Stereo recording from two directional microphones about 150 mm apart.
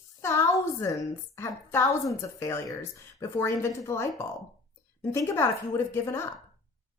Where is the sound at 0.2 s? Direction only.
20° left (ahead or behind).